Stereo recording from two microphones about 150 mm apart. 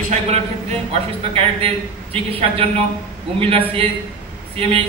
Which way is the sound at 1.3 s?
40° right (ahead or behind).